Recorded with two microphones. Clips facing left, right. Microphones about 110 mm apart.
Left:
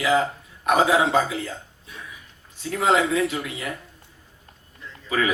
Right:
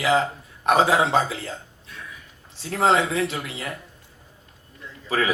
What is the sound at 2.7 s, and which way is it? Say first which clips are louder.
Speech: even; 30° right (ahead or behind).